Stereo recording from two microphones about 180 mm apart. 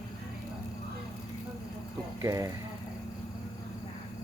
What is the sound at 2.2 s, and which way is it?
Speech, 15° right (ahead or behind).